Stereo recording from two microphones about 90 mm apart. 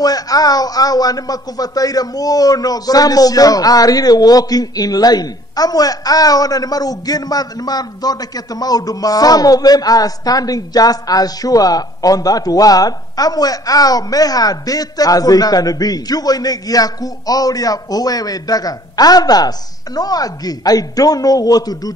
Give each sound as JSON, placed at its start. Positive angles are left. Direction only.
{"t": 0.0, "sound": "a man's voice", "side_deg": 45}